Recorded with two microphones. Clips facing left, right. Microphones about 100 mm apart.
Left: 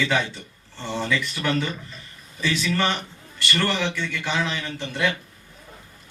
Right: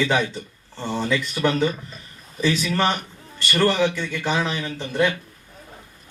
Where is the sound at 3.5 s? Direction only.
15° right (ahead or behind).